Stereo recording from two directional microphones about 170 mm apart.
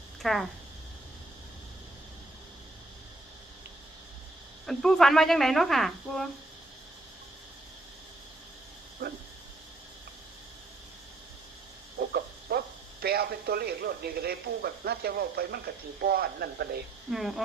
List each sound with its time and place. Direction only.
0.2 s speech: centre (ahead or behind)
4.6 s speech: centre (ahead or behind)
9.0 s a sound: 60° right (ahead or behind)
11.9 s speech: 65° right (ahead or behind)
17.1 s speech: centre (ahead or behind)